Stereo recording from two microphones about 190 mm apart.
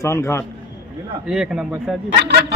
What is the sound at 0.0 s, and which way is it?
Speech, 15° left (ahead or behind).